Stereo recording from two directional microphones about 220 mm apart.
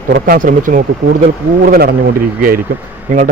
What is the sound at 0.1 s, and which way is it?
A man's voice, 40° right (ahead or behind).